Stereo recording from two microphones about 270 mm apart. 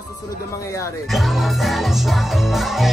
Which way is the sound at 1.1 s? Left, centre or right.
Centre.